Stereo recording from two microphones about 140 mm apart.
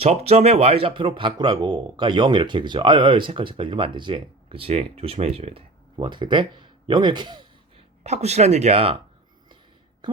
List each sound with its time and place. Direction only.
0.0 s speech: 45° right (ahead or behind)
8.0 s speech: 50° right (ahead or behind)